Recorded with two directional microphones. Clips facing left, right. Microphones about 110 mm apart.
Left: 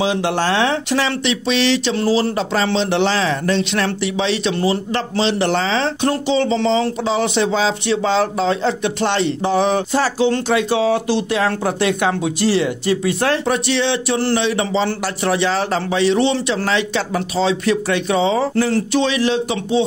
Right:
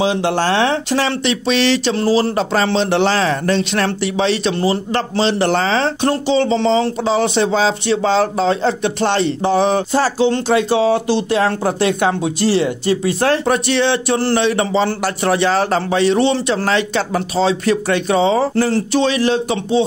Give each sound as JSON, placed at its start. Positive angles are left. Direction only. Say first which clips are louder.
{"t": 0.0, "sound": "speech", "louder": "right 2 dB", "side_deg": -30}